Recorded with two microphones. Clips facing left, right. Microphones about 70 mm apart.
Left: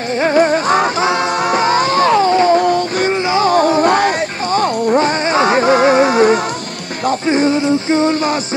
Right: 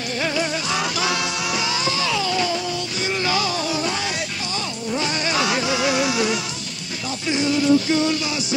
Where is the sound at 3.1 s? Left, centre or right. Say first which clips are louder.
Left 7 dB; left.